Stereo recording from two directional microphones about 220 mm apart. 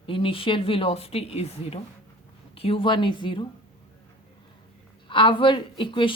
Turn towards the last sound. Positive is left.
turn(degrees=20)  # may be behind; listen again after turning